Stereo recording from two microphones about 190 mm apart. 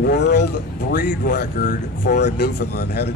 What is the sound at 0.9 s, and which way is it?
A man's voice, 45° left (ahead or behind).